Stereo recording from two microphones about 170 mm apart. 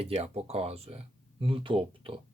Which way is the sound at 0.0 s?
35° right (ahead or behind).